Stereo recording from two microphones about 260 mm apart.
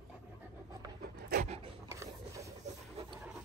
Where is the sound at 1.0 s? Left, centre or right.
Right.